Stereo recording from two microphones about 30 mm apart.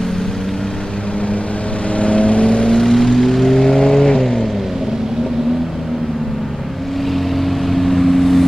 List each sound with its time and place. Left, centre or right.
2.0 s vehicle: left
2.7 s vehicle: centre
7.7 s vehicle: centre